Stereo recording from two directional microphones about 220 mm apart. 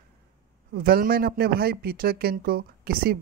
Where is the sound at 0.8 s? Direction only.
45° right (ahead or behind).